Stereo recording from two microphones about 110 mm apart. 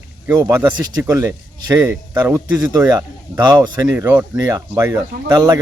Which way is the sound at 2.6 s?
35° right (ahead or behind).